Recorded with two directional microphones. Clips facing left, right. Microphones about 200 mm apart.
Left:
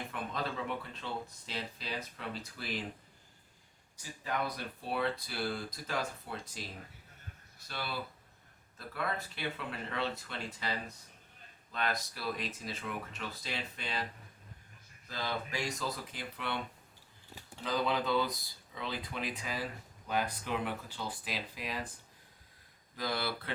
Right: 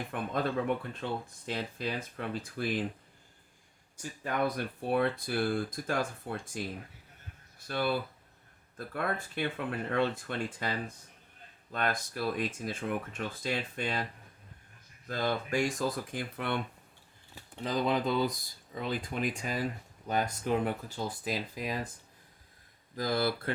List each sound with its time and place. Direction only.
0.1 s speech: 50° right (ahead or behind)
3.9 s speech: 50° right (ahead or behind)
7.7 s speech: 50° right (ahead or behind)
15.0 s speech: 50° right (ahead or behind)
17.6 s speech: 45° right (ahead or behind)
23.0 s speech: 45° right (ahead or behind)